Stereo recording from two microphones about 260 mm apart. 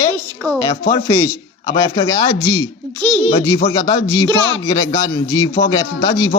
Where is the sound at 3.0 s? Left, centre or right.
Centre.